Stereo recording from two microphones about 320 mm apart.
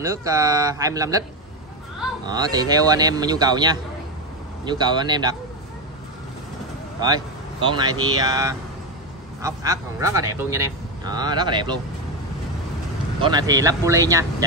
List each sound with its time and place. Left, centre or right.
0.0 s speech: centre
2.2 s speech: centre
7.6 s speech: centre
13.2 s speech: centre